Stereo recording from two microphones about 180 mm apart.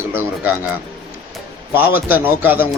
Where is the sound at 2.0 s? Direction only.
10° right (ahead or behind).